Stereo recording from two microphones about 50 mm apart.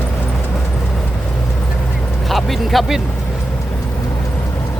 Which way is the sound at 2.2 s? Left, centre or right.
Centre.